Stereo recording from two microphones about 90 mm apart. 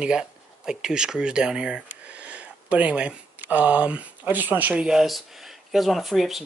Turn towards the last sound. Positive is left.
turn(degrees=0)  # may be behind; listen again after turning